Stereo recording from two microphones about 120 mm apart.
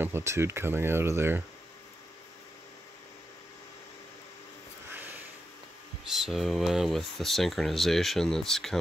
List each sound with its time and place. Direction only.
0.0 s speech: 20° right (ahead or behind)
4.9 s a sound: 15° right (ahead or behind)
6.0 s speech: 5° right (ahead or behind)